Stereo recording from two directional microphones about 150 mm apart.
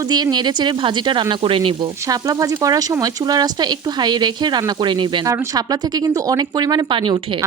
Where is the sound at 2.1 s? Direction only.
25° right (ahead or behind).